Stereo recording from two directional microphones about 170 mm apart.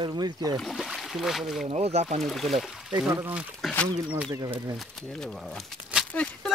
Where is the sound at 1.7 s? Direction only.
40° right (ahead or behind).